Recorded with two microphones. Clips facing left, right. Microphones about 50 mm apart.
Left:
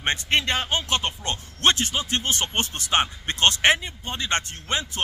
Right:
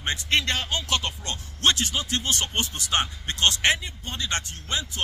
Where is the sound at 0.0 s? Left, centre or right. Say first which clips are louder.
Left 3 dB; left.